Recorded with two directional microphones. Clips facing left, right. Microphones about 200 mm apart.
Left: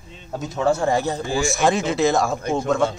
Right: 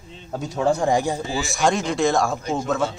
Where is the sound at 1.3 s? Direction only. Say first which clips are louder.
Left 3 dB; centre (ahead or behind).